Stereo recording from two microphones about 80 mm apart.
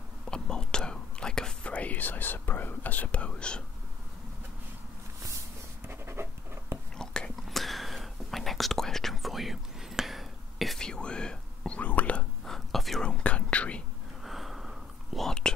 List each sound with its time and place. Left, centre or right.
0.3 s whispering: centre
5.9 s writing: right
7.0 s whispering: centre
12.4 s whispering: centre
14.2 s whispering: centre